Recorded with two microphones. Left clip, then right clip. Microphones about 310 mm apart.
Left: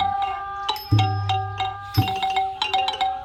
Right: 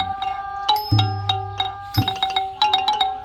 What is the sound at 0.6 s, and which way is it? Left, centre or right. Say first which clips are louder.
Music: right 6 dB; centre.